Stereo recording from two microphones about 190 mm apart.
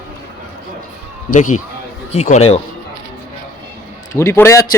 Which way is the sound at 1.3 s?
40° left (ahead or behind).